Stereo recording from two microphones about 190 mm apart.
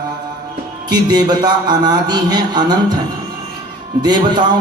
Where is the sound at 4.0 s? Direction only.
20° right (ahead or behind).